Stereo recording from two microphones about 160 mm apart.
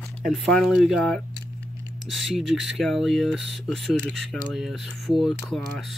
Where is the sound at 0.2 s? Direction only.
Centre (ahead or behind).